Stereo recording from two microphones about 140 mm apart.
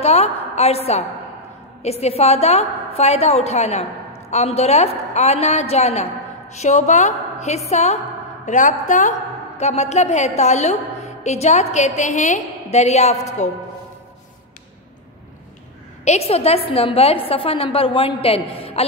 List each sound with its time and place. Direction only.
0.0 s a woman's voice: 50° left (ahead or behind)
8.5 s a woman's voice: 60° left (ahead or behind)
9.6 s a woman's voice: 55° left (ahead or behind)
16.0 s a woman's voice: 50° left (ahead or behind)